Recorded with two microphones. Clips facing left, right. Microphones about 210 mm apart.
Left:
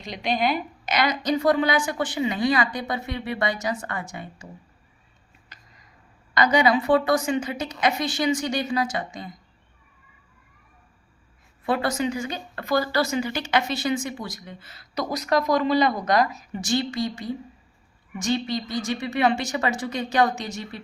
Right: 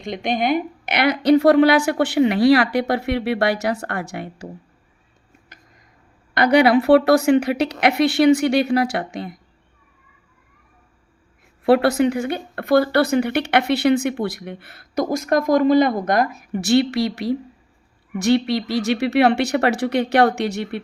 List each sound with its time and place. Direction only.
0.0 s a woman's voice: 50° right (ahead or behind); by 4.4 s 70° right (ahead or behind)
6.3 s a woman's voice: 65° right (ahead or behind)
11.6 s a woman's voice: 65° right (ahead or behind)